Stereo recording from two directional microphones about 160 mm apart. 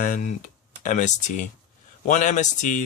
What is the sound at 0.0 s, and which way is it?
Speech, 55° left (ahead or behind).